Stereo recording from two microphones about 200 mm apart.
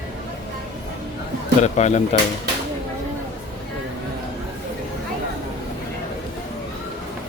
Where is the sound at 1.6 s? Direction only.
35° left (ahead or behind).